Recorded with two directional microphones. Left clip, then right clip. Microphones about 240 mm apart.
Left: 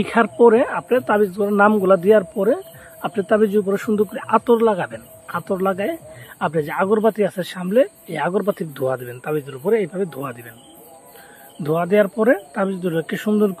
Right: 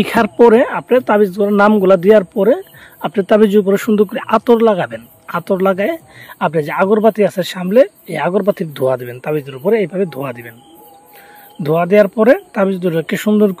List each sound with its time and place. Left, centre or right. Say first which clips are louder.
0.0 s speech: right 4 dB; right
11.6 s speech: right 6 dB; right